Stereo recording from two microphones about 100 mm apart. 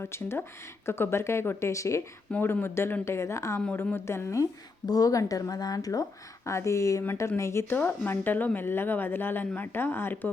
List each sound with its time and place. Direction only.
0.0 s speech: 25° left (ahead or behind)
2.3 s speech: 20° left (ahead or behind)